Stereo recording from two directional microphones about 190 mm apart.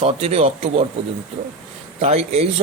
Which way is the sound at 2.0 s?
35° right (ahead or behind).